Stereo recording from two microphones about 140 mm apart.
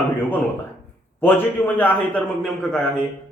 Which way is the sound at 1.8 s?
10° left (ahead or behind).